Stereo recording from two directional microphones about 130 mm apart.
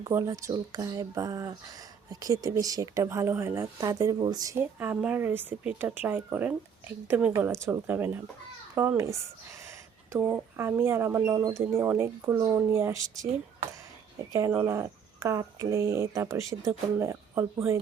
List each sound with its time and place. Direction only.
0.0 s speech: 20° right (ahead or behind)
4.6 s speech: 15° right (ahead or behind)